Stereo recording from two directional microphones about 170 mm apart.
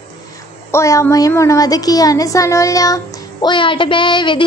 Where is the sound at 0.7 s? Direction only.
15° left (ahead or behind).